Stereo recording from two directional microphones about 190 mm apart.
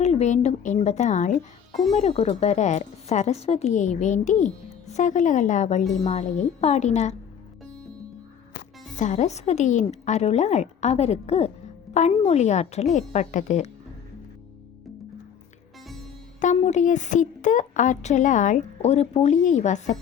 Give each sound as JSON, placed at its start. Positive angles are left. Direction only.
{"t": 0.0, "sound": "a woman's voice", "side_deg": 35}
{"t": 9.0, "sound": "a woman's voice", "side_deg": 40}
{"t": 16.4, "sound": "a woman's voice", "side_deg": 40}